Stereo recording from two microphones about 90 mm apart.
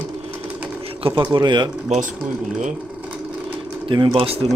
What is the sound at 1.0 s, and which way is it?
Speech, 70° right (ahead or behind).